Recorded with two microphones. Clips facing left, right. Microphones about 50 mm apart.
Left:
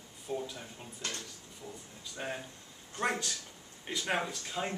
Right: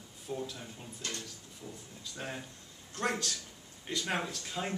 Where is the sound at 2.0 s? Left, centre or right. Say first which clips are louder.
Left 2 dB; centre.